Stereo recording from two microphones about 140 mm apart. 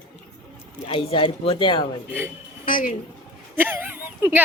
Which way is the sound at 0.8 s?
40° left (ahead or behind).